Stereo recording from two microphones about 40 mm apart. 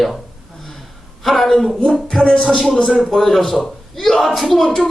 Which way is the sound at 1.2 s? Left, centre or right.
Centre.